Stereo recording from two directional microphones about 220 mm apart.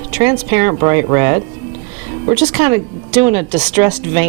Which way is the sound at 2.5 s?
10° right (ahead or behind).